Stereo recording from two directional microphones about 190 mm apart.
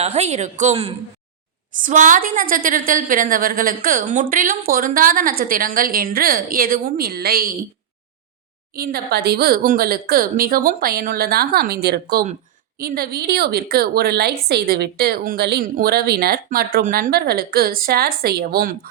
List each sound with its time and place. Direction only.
0.0 s a woman's voice: 35° right (ahead or behind); by 7.5 s 50° right (ahead or behind)
8.7 s a woman's voice: 50° right (ahead or behind)